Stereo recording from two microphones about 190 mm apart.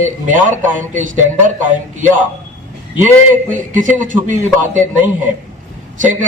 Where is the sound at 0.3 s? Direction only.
40° right (ahead or behind).